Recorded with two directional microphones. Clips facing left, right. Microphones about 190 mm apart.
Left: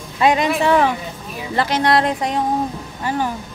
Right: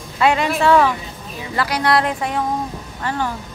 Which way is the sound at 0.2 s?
15° left (ahead or behind).